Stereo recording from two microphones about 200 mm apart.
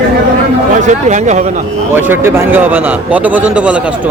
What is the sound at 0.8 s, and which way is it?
Speech, 35° right (ahead or behind).